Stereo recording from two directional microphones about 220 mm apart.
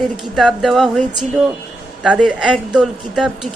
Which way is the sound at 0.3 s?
Centre (ahead or behind).